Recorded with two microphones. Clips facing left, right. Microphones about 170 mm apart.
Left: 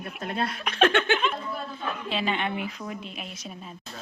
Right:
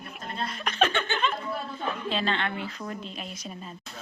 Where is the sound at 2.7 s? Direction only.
5° left (ahead or behind).